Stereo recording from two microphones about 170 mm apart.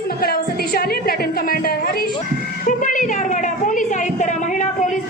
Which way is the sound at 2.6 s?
50° left (ahead or behind).